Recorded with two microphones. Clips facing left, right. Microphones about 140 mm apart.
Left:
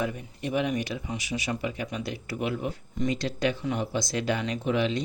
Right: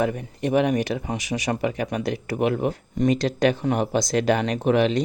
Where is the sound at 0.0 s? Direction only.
70° right (ahead or behind).